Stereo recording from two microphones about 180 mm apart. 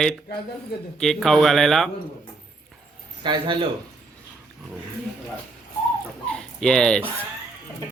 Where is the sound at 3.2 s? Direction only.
25° right (ahead or behind).